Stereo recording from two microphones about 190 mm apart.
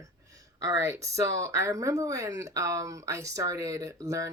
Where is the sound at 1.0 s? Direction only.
15° right (ahead or behind).